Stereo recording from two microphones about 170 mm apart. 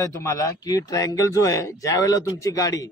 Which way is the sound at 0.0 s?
15° left (ahead or behind).